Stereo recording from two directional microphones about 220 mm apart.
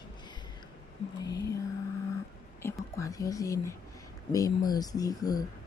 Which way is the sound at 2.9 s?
15° left (ahead or behind).